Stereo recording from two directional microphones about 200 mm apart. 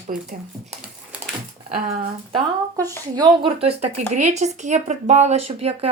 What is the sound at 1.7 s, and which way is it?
Speech, 30° right (ahead or behind).